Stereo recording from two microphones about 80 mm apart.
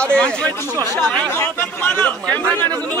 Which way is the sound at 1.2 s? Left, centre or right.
Left.